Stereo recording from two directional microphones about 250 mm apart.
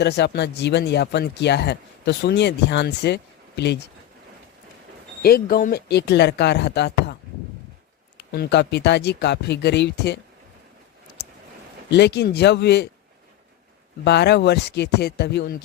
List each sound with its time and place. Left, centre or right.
0.0 s speech: left
5.2 s speech: left
8.3 s speech: left
11.9 s speech: left
14.0 s speech: left